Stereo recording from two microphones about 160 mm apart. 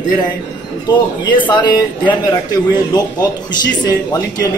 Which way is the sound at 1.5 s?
30° left (ahead or behind).